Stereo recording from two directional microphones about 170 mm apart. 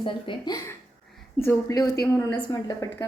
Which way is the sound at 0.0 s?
25° left (ahead or behind).